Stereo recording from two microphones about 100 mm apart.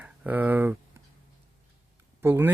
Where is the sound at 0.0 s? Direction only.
15° right (ahead or behind).